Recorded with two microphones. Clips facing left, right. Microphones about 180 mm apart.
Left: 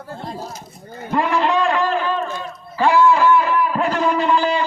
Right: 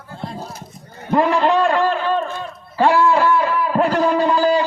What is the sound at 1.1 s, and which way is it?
Speech, 40° right (ahead or behind).